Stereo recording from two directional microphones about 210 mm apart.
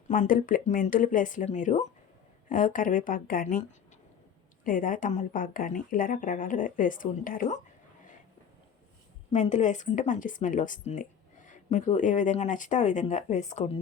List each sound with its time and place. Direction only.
0.1 s speech: 40° left (ahead or behind)
4.6 s speech: 40° left (ahead or behind)
9.3 s speech: 35° left (ahead or behind)